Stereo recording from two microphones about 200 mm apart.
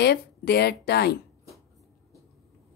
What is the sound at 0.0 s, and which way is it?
Speech, 55° left (ahead or behind).